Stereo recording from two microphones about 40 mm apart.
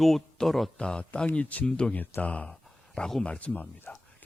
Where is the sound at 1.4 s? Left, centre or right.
Left.